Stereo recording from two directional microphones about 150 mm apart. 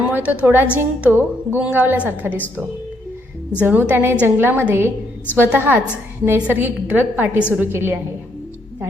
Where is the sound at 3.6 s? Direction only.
10° right (ahead or behind).